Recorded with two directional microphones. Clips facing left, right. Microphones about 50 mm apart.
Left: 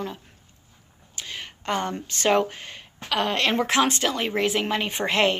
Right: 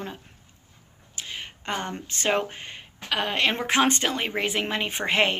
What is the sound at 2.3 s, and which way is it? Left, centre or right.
Speech, centre.